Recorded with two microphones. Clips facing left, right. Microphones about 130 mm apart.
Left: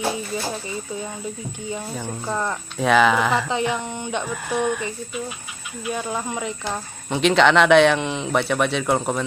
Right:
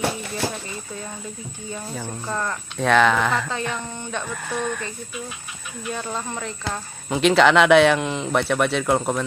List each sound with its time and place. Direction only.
1.7 s speech: 10° left (ahead or behind)
2.8 s speech: 5° left (ahead or behind)
3.4 s speech: 15° left (ahead or behind)
7.1 s speech: centre (ahead or behind)